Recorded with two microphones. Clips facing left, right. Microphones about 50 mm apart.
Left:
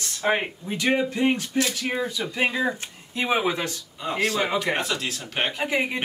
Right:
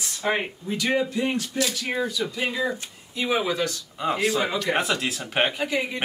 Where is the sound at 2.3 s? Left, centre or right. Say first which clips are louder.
Left 5 dB; left.